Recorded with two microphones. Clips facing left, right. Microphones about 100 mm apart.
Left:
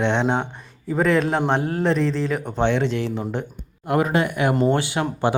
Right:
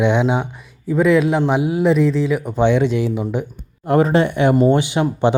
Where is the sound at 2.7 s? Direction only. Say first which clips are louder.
Right 6 dB; 15° right (ahead or behind).